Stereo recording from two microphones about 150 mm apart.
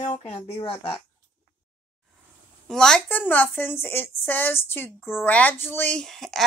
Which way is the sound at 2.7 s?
5° left (ahead or behind).